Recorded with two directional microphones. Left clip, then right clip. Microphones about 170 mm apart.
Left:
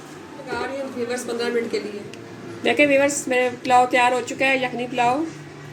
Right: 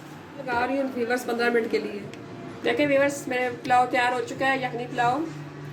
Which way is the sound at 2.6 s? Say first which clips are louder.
Left 5 dB; 30° left (ahead or behind).